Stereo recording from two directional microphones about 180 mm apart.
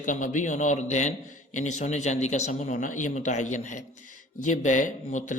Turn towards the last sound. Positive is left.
turn(degrees=45)  # may be behind; listen again after turning